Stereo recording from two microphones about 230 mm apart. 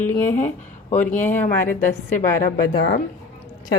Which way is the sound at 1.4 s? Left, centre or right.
Left.